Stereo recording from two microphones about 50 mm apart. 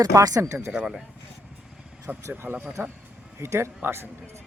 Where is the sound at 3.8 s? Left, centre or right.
Right.